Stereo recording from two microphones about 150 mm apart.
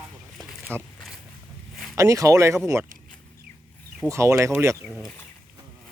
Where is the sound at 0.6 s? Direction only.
15° right (ahead or behind).